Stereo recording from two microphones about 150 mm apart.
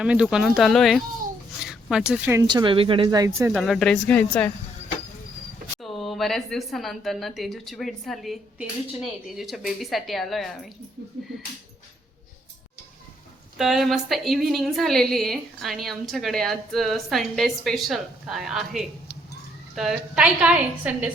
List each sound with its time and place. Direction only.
0.0 s a woman's voice: 5° right (ahead or behind)
2.5 s speech: 30° right (ahead or behind)
3.2 s speech: 20° right (ahead or behind)
3.5 s a woman's voice: centre (ahead or behind)
5.8 s a woman's voice: centre (ahead or behind)
13.6 s a woman's voice: centre (ahead or behind)